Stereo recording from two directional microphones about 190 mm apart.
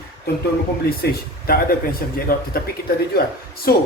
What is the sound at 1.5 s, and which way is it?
A man's voice, 50° left (ahead or behind).